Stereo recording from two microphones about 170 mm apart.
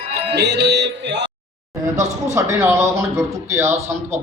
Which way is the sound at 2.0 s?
40° right (ahead or behind).